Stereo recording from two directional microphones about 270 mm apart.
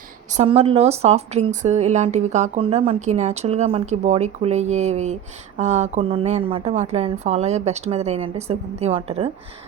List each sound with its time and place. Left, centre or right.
0.3 s a woman's voice: right